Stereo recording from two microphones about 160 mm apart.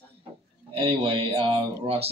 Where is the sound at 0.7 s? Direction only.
35° right (ahead or behind).